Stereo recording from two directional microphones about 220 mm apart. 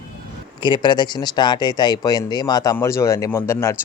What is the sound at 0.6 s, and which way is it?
Speech, 20° left (ahead or behind).